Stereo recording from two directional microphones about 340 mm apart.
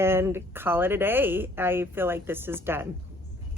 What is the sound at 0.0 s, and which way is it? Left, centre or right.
Speech, centre.